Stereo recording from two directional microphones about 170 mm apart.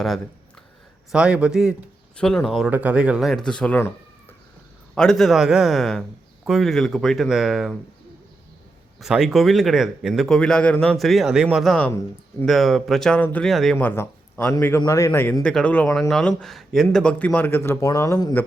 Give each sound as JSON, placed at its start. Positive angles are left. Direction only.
{"t": 1.1, "sound": "a man's voice", "side_deg": -5}
{"t": 4.9, "sound": "a man's voice", "side_deg": 0}
{"t": 9.0, "sound": "a man's voice", "side_deg": 0}
{"t": 11.9, "sound": "a man's voice", "side_deg": 15}
{"t": 12.5, "sound": "a man's voice", "side_deg": 0}
{"t": 13.7, "sound": "a man's voice", "side_deg": 15}